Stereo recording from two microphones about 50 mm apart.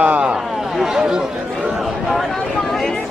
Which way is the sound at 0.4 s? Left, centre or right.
Centre.